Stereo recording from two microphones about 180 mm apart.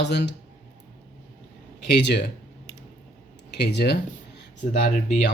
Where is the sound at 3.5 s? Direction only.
65° left (ahead or behind).